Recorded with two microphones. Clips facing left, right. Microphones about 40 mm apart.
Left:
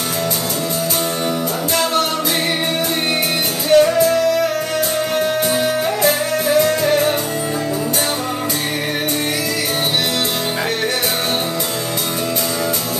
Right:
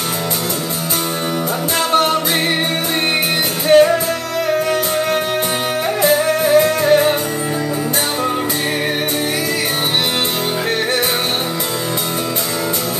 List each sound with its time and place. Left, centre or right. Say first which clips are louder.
3.7 s music: right 2 dB; right
6.4 s music: left 1 dB; right